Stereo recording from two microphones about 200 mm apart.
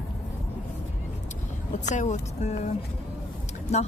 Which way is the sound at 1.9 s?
35° left (ahead or behind).